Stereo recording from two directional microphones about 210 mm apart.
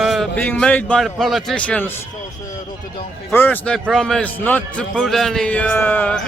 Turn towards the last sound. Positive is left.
turn(degrees=5)  # may be behind; listen again after turning